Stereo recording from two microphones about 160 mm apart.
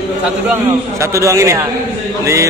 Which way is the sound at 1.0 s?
20° right (ahead or behind).